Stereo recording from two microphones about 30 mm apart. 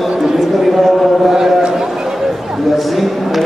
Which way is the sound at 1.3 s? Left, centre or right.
Centre.